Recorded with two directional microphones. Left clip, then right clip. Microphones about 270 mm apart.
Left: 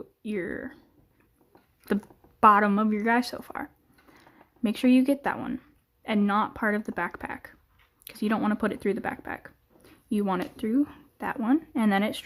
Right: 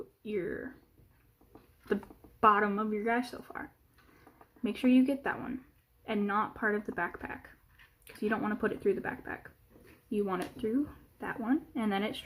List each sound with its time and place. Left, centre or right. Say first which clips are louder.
0.2 s speech: left 3 dB; left
2.4 s speech: left 7 dB; left